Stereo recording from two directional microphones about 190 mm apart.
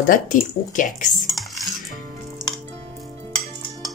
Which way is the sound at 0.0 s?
45° left (ahead or behind).